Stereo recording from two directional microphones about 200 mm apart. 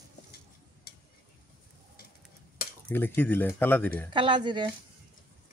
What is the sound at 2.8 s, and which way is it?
Speech, 10° left (ahead or behind).